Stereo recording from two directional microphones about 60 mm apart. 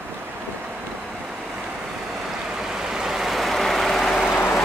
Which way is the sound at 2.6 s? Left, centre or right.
Centre.